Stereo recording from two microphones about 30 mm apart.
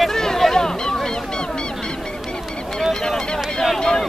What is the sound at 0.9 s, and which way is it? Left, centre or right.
Honk, left.